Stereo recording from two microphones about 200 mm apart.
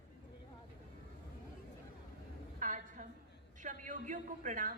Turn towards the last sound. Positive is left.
turn(degrees=-40)  # may be behind; listen again after turning